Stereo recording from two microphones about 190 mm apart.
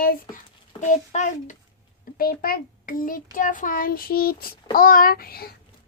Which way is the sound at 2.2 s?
50° left (ahead or behind).